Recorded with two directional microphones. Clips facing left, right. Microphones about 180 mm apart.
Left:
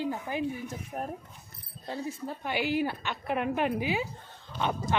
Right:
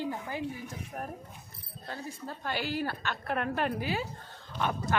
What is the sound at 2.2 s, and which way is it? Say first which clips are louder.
A woman's voice: left 2 dB; 15° left (ahead or behind).